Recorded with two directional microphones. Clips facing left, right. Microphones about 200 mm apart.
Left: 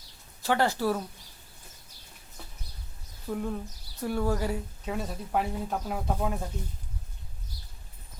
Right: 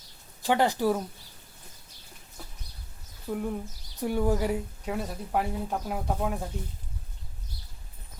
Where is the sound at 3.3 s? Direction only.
10° right (ahead or behind).